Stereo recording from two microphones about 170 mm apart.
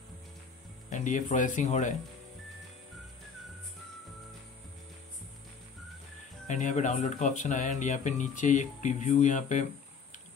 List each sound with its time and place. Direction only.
0.8 s speech: 45° left (ahead or behind)
6.4 s speech: 45° left (ahead or behind)